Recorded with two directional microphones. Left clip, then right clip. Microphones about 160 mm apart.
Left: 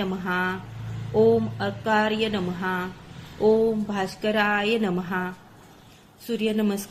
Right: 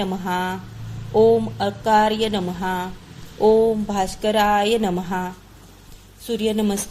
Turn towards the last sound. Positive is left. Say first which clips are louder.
# right 4 dB
turn(degrees=-30)  # may be behind; listen again after turning